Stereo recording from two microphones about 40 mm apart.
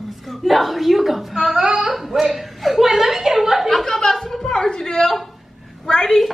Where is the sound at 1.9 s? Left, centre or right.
Centre.